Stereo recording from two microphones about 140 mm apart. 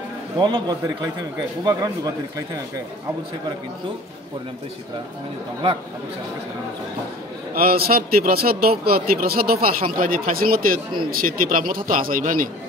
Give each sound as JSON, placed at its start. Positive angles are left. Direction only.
{"t": 0.4, "sound": "speech", "side_deg": -30}
{"t": 7.5, "sound": "a man's voice", "side_deg": -90}